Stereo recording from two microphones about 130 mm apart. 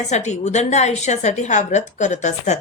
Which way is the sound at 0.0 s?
65° left (ahead or behind).